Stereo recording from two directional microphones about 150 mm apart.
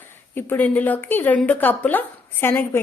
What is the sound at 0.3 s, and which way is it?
A woman's voice, 10° left (ahead or behind).